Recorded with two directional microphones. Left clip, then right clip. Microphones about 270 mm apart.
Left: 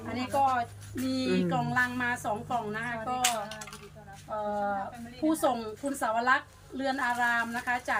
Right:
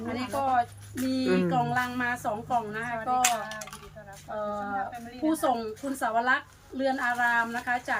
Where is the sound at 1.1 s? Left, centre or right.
Centre.